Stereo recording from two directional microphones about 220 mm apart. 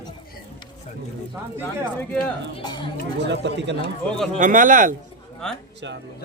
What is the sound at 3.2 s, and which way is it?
Speech, 50° right (ahead or behind).